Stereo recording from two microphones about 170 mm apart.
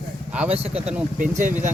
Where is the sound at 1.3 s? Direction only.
45° right (ahead or behind).